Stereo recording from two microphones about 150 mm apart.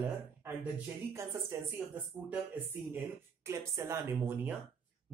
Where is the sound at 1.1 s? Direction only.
15° right (ahead or behind).